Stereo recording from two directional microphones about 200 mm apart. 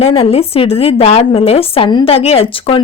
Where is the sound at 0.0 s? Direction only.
30° left (ahead or behind).